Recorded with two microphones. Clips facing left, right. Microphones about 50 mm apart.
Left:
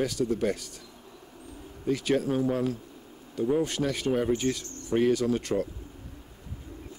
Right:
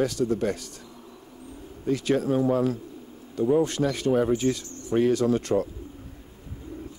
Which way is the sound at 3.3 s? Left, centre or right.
Centre.